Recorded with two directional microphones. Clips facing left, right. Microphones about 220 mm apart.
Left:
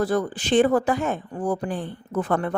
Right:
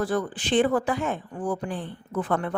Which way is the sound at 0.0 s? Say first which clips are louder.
Left 3 dB; 40° left (ahead or behind).